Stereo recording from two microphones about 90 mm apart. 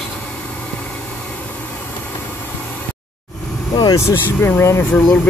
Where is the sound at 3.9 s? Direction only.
30° left (ahead or behind).